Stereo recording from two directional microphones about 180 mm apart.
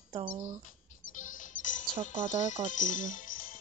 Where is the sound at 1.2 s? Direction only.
45° left (ahead or behind).